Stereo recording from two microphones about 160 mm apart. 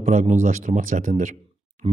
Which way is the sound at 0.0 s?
50° right (ahead or behind).